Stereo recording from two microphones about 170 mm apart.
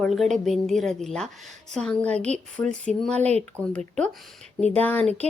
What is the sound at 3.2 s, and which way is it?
Speech, 40° right (ahead or behind).